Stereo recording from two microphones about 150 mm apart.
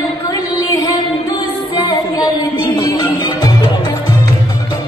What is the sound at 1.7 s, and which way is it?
Music, 25° left (ahead or behind).